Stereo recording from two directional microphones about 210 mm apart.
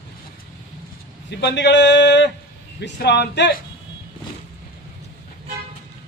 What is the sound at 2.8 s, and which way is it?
Speech, 50° left (ahead or behind).